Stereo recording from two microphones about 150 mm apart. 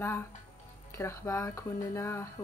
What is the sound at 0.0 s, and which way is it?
Speech, 15° left (ahead or behind).